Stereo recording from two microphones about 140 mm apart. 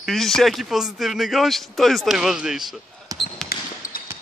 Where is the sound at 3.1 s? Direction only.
25° right (ahead or behind).